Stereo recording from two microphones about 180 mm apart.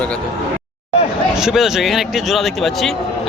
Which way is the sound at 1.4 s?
Centre (ahead or behind).